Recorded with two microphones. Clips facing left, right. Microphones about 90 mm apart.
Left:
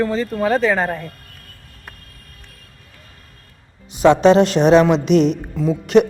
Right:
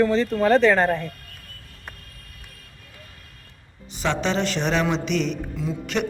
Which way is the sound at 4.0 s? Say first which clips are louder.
Left 12 dB; 45° left (ahead or behind).